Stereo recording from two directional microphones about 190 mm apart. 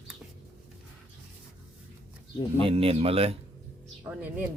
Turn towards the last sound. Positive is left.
turn(degrees=-10)  # may be behind; listen again after turning